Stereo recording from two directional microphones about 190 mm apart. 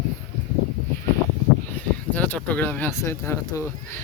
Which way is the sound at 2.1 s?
10° left (ahead or behind).